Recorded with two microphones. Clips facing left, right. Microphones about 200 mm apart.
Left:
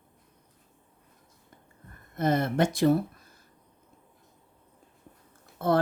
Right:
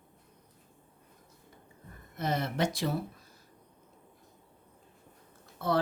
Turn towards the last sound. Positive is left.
turn(degrees=50)  # may be behind; listen again after turning